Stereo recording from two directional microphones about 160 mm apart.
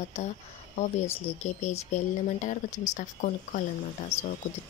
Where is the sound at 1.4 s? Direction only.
45° left (ahead or behind).